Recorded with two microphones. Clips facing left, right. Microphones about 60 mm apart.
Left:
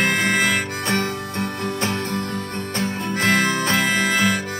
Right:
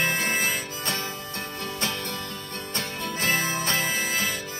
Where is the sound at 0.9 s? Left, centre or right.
Left.